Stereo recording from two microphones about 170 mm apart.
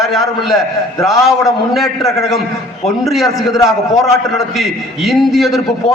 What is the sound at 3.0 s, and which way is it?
A man's voice, centre (ahead or behind).